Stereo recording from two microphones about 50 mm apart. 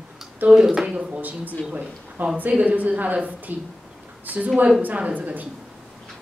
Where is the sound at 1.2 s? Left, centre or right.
Right.